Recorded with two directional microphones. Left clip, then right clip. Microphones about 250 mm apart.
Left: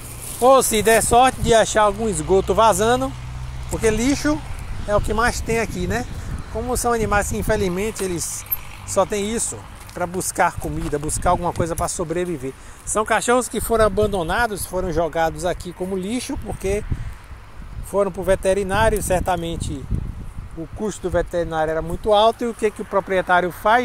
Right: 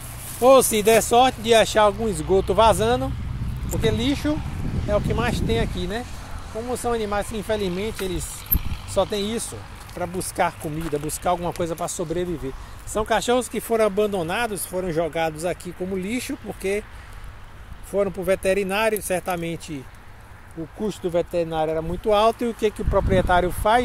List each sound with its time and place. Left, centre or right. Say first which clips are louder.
0.4 s speech: left 1 dB; centre
8.9 s speech: left 3 dB; centre
17.9 s speech: left 3 dB; centre
20.8 s speech: left 2 dB; centre